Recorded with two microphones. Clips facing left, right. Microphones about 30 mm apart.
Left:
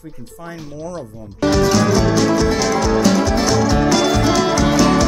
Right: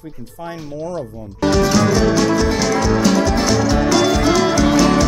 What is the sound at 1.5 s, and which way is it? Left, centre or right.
Music, centre.